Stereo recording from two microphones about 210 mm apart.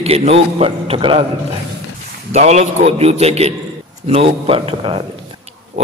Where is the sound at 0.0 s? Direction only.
30° right (ahead or behind).